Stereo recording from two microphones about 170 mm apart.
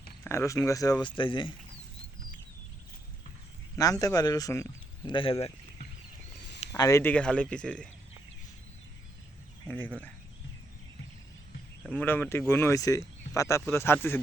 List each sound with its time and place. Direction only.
0.3 s speech: 15° left (ahead or behind)
3.8 s a man's voice: 20° left (ahead or behind)
5.1 s speech: 30° left (ahead or behind)
6.7 s speech: 20° left (ahead or behind)
9.6 s speech: 10° left (ahead or behind)
11.8 s speech: 10° left (ahead or behind)